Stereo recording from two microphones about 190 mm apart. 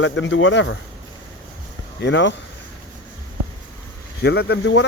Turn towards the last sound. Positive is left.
turn(degrees=70)  # may be behind; listen again after turning